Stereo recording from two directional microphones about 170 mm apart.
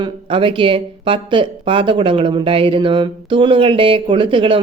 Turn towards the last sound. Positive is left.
turn(degrees=-30)  # may be behind; listen again after turning